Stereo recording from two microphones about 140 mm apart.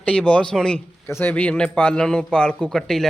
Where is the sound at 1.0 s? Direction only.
15° left (ahead or behind).